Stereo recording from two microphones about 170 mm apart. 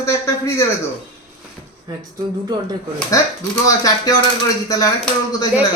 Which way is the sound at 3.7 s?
20° left (ahead or behind).